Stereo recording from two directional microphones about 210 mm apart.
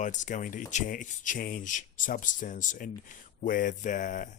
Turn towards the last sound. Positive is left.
turn(degrees=35)  # may be behind; listen again after turning